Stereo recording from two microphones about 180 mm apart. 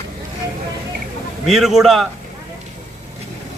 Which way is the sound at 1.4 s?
Centre (ahead or behind).